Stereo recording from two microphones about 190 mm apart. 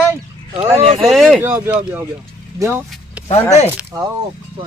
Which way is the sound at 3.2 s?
35° left (ahead or behind).